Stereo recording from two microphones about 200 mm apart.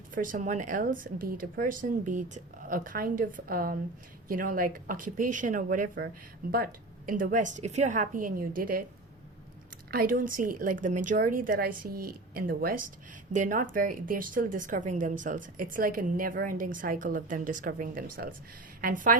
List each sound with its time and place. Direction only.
0.1 s speech: 40° right (ahead or behind)
9.9 s speech: 45° right (ahead or behind)